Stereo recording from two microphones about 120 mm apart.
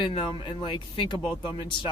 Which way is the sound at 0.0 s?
45° left (ahead or behind).